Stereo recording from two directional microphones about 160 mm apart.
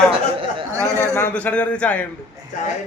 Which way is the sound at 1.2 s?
10° left (ahead or behind).